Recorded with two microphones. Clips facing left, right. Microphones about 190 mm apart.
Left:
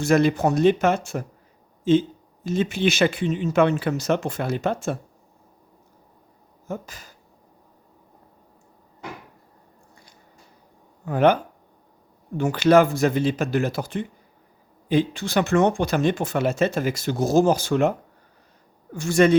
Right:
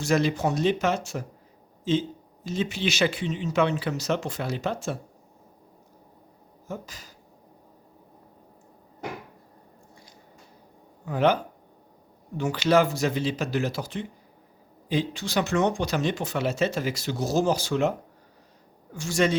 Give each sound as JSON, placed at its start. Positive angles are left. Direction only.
{"t": 0.0, "sound": "speech", "side_deg": 55}
{"t": 6.7, "sound": "speech", "side_deg": 55}
{"t": 11.0, "sound": "speech", "side_deg": 55}
{"t": 12.4, "sound": "speech", "side_deg": 55}
{"t": 18.9, "sound": "speech", "side_deg": 55}